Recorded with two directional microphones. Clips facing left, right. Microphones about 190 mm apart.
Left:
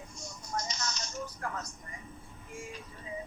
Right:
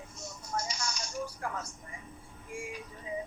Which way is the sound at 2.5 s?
10° right (ahead or behind).